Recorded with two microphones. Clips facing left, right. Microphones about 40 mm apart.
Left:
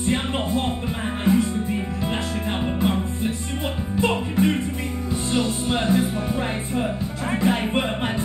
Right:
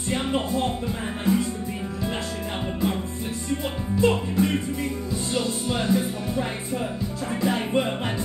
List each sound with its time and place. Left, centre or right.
0.1 s music: left
2.8 s music: left